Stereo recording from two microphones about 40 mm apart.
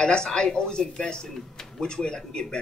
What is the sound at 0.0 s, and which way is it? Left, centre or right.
Speech, centre.